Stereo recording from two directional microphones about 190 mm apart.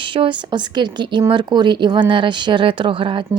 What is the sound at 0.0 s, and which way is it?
A woman's voice, 25° right (ahead or behind).